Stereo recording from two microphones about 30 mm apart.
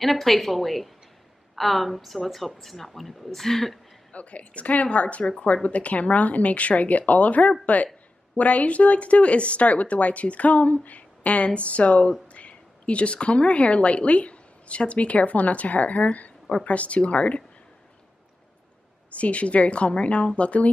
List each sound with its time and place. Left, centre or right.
0.0 s speech: centre
4.1 s speech: left
11.4 s speech: left
19.1 s speech: left